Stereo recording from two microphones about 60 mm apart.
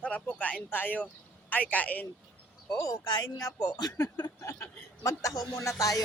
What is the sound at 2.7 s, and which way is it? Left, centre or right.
Speech, left.